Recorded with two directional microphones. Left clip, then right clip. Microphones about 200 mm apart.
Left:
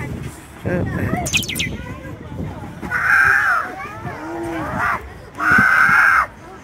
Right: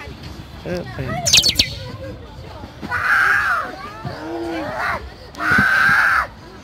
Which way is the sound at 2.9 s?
25° right (ahead or behind).